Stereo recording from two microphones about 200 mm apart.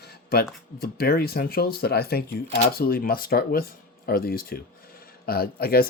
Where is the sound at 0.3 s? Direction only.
50° left (ahead or behind).